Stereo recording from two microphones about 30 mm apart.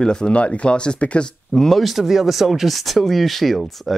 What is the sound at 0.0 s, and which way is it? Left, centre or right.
Speech, left.